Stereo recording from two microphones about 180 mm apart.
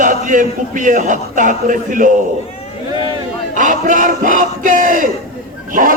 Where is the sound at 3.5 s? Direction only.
45° right (ahead or behind).